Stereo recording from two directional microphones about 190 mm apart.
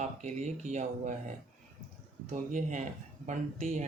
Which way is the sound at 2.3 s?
40° right (ahead or behind).